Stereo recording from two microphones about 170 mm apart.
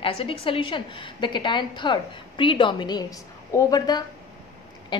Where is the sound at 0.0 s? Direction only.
30° left (ahead or behind).